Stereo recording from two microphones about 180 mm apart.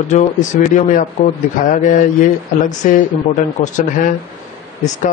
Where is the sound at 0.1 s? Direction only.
45° left (ahead or behind).